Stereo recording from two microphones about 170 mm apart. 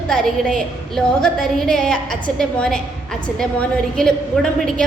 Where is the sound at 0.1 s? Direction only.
Centre (ahead or behind).